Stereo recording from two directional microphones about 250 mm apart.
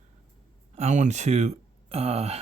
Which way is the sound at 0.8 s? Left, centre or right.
Right.